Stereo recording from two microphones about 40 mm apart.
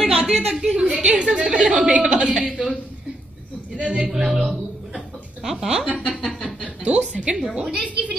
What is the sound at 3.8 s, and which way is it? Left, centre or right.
Speech, right.